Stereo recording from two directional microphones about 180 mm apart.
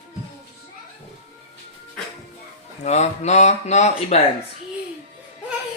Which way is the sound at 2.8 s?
40° left (ahead or behind).